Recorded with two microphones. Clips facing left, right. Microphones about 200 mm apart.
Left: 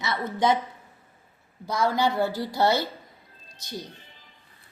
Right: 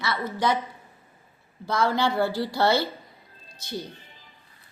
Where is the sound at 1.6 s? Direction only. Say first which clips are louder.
Even; 15° left (ahead or behind).